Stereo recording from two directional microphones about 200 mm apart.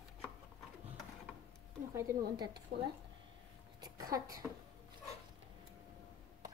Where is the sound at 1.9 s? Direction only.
20° right (ahead or behind).